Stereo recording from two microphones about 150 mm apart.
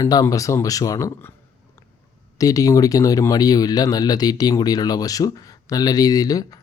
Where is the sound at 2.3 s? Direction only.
25° left (ahead or behind).